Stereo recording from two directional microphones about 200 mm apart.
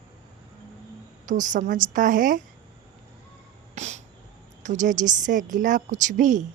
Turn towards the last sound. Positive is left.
turn(degrees=-40)  # may be behind; listen again after turning